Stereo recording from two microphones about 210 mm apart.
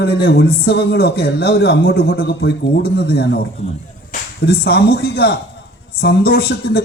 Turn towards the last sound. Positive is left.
turn(degrees=50)  # may be behind; listen again after turning